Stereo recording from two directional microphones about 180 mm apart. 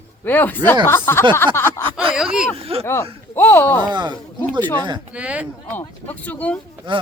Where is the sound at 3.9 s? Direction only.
25° right (ahead or behind).